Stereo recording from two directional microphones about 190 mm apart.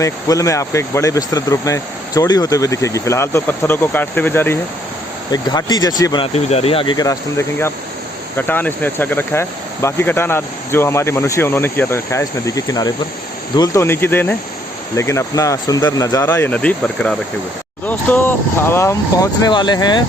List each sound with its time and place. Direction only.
0.0 s speech: 15° left (ahead or behind)